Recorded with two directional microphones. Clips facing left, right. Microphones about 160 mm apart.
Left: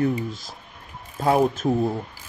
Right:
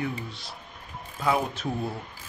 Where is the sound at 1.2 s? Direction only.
45° left (ahead or behind).